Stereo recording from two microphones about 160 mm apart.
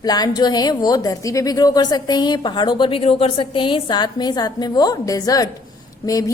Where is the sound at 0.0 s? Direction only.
25° left (ahead or behind).